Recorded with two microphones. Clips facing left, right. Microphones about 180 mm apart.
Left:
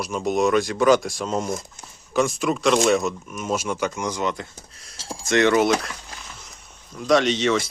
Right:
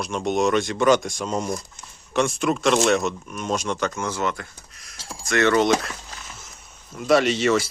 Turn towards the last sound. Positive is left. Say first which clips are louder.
# right 1 dB
turn(degrees=-5)  # may be behind; listen again after turning